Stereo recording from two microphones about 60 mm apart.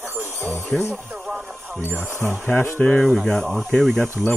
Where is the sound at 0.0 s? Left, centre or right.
Right.